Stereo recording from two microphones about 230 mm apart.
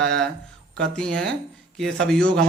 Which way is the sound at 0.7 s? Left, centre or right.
Centre.